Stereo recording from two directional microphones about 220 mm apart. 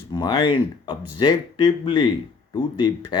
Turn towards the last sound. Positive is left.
turn(degrees=20)  # may be behind; listen again after turning